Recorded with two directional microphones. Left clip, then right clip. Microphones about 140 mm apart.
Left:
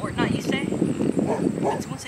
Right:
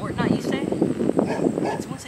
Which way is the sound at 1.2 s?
35° right (ahead or behind).